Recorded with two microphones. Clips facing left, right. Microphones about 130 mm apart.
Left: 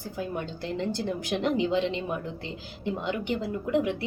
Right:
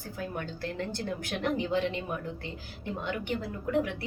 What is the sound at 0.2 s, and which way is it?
A woman's voice, 20° left (ahead or behind).